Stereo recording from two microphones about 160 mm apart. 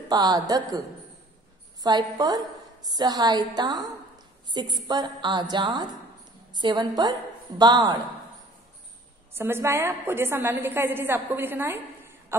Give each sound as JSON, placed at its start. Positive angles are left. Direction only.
{"t": 0.1, "sound": "a woman's voice", "side_deg": -25}
{"t": 9.3, "sound": "a woman's voice", "side_deg": -15}